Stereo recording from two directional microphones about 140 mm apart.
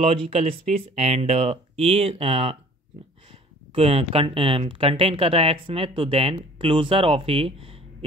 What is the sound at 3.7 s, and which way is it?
Speech, 45° right (ahead or behind).